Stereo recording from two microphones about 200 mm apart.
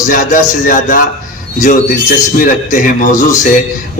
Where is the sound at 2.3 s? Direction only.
45° left (ahead or behind).